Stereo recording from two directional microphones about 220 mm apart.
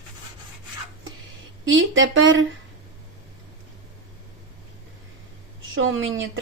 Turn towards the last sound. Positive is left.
turn(degrees=-60)  # may be behind; listen again after turning